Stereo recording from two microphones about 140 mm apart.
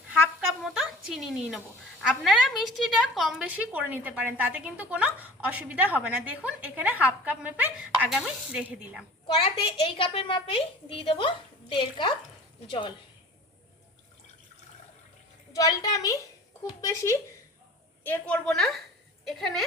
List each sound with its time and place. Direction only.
0.1 s speech: 5° right (ahead or behind)
9.2 s a child's voice: 35° left (ahead or behind)
15.5 s a woman's voice: 25° left (ahead or behind)
18.0 s a woman's voice: 10° left (ahead or behind)